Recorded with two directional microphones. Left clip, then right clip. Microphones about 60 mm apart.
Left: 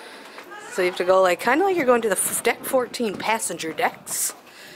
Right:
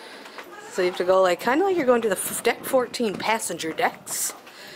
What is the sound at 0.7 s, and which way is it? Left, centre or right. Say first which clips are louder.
A woman's voice: left 1 dB; centre.